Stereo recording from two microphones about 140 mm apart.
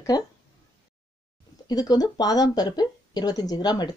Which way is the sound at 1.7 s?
30° left (ahead or behind).